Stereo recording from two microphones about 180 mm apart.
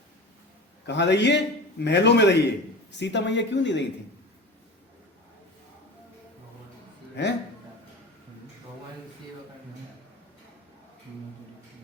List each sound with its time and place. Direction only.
0.9 s speech: 75° left (ahead or behind)
7.2 s speech: 75° left (ahead or behind)